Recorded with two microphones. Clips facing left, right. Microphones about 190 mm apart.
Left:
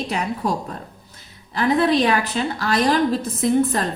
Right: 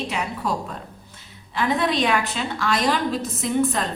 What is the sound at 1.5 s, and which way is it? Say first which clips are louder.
A woman's voice: left 4 dB; 35° left (ahead or behind).